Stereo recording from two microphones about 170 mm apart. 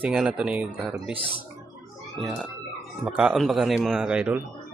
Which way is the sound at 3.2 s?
Centre (ahead or behind).